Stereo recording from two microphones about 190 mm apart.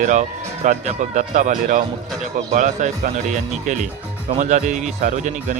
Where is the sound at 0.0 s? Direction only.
40° right (ahead or behind).